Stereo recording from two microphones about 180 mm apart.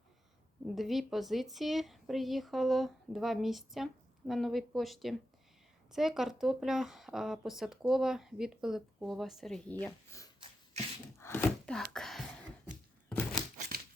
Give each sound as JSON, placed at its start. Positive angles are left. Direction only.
{"t": 0.8, "sound": "speech", "side_deg": 0}
{"t": 9.8, "sound": "speech", "side_deg": 15}
{"t": 11.2, "sound": "a sound", "side_deg": 10}